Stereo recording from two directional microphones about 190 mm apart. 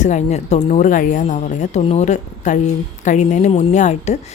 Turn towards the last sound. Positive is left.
turn(degrees=40)  # may be behind; listen again after turning